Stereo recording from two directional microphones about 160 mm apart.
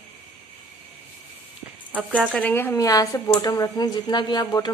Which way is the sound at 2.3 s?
10° left (ahead or behind).